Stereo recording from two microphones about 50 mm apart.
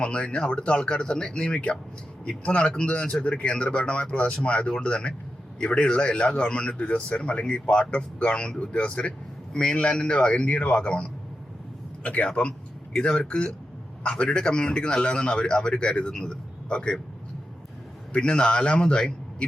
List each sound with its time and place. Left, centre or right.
0.0 s speech: left
18.1 s speech: centre